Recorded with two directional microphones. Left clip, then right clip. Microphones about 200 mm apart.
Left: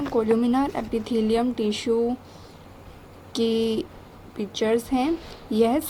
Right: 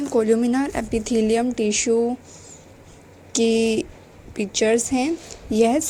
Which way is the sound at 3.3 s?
20° right (ahead or behind).